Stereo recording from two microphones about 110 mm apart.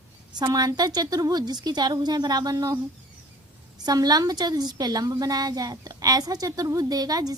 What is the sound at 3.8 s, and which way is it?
A woman's voice, 35° right (ahead or behind).